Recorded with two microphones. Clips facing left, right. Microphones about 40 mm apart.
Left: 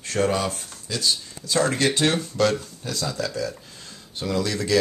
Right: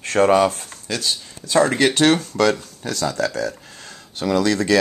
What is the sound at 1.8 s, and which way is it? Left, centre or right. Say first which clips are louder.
Speech: right 6 dB; right.